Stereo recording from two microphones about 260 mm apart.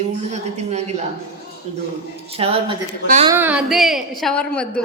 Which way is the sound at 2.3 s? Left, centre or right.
Right.